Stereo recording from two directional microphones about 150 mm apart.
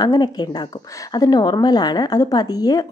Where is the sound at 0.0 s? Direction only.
25° left (ahead or behind).